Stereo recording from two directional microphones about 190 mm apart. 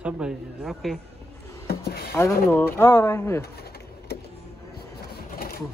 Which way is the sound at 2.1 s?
15° left (ahead or behind).